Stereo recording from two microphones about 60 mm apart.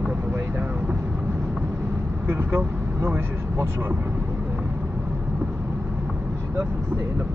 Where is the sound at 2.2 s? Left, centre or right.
Right.